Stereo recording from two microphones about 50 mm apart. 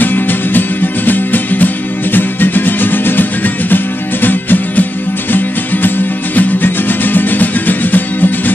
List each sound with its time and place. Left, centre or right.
0.0 s music: left